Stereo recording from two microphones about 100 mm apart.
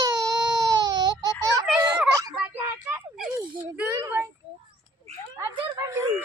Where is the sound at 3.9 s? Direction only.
25° right (ahead or behind).